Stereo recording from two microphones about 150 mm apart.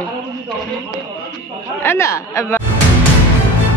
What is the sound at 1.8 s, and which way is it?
Speech, 15° left (ahead or behind).